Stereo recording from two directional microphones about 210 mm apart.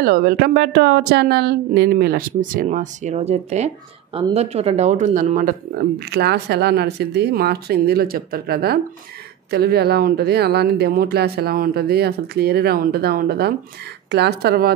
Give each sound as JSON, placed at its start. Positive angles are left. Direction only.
{"t": 0.0, "sound": "speech", "side_deg": -45}